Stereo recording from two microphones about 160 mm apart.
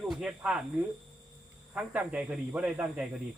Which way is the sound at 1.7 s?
10° right (ahead or behind).